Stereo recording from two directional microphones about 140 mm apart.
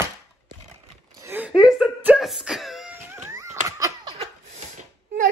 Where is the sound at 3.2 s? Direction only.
20° right (ahead or behind).